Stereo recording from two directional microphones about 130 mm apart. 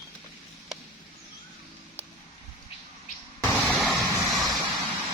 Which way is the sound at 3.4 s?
15° left (ahead or behind).